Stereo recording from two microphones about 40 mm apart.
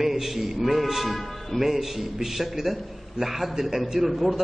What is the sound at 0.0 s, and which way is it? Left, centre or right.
A man's voice, centre.